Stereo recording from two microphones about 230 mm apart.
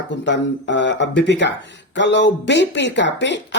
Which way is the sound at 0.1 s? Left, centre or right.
Left.